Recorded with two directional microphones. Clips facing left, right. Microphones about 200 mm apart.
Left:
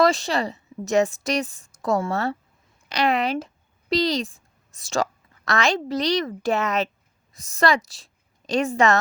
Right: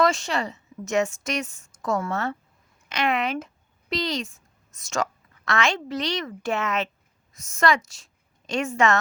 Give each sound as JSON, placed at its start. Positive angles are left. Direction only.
{"t": 0.0, "sound": "a woman's voice", "side_deg": 35}